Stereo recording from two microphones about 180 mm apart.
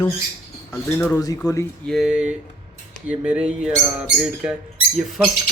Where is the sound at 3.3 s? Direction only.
5° right (ahead or behind).